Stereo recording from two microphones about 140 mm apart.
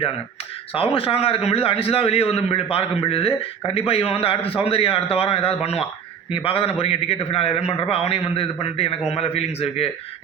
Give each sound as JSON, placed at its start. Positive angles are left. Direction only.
{"t": 0.7, "sound": "a man's voice", "side_deg": 45}